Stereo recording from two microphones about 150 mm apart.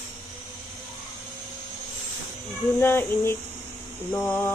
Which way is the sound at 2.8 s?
15° left (ahead or behind).